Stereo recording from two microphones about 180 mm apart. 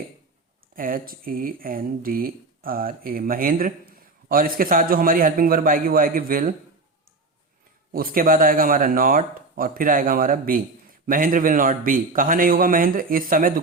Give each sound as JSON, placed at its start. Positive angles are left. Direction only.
{"t": 0.8, "sound": "speech", "side_deg": -55}
{"t": 7.9, "sound": "speech", "side_deg": -50}